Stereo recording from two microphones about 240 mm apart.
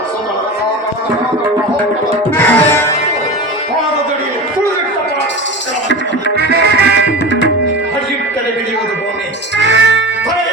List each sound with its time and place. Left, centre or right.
2.3 s music: centre
6.3 s music: right
9.6 s music: right